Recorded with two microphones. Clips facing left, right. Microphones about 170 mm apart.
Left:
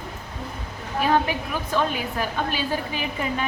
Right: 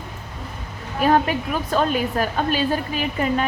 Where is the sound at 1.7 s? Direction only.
50° right (ahead or behind).